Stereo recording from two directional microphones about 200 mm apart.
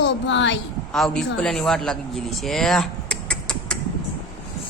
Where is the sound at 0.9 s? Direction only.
Centre (ahead or behind).